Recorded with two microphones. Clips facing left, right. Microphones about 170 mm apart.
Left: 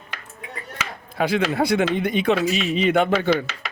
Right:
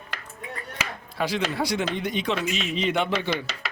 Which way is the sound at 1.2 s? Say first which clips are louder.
Left 5 dB; 55° left (ahead or behind).